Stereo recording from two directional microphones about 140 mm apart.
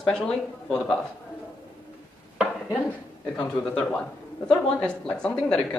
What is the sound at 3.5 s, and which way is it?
Speech, 5° left (ahead or behind).